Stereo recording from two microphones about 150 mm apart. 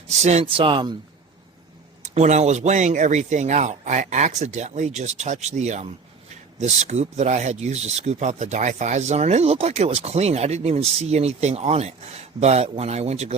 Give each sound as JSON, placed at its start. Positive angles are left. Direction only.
{"t": 0.1, "sound": "speech", "side_deg": -45}
{"t": 2.0, "sound": "speech", "side_deg": -50}